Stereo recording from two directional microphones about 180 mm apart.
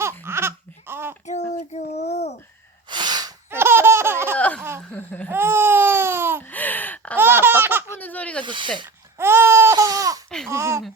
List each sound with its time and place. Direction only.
0.0 s laughter: 15° right (ahead or behind)
1.3 s child singing: 40° left (ahead or behind)
2.9 s laughter: 25° right (ahead or behind)
4.4 s a sound: 10° left (ahead or behind)
4.8 s laughter: 10° left (ahead or behind)
5.3 s a sound: 15° right (ahead or behind)
6.5 s gasp: 10° left (ahead or behind)
7.2 s laughter: 10° right (ahead or behind)
7.9 s baby laughter: 10° left (ahead or behind)
8.4 s speech: 25° right (ahead or behind)
9.1 s a sound: 15° right (ahead or behind)
10.2 s a sound: 5° left (ahead or behind)
10.5 s speech: 15° right (ahead or behind)